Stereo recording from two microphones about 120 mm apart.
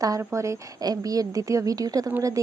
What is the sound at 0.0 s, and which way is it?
A woman's voice, 25° right (ahead or behind).